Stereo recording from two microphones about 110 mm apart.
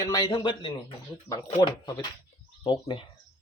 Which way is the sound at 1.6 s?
40° left (ahead or behind).